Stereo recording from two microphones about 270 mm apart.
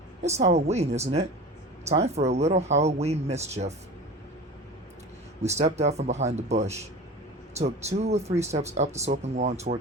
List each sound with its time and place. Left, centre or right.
0.2 s speech: right
5.4 s speech: right